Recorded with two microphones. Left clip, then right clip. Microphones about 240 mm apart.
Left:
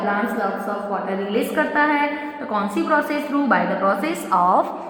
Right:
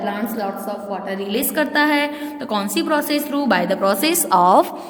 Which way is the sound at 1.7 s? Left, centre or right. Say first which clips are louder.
Right 2 dB; right.